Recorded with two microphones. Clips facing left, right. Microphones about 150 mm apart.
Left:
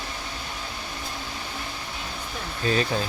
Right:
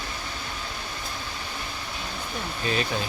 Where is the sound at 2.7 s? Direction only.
35° left (ahead or behind).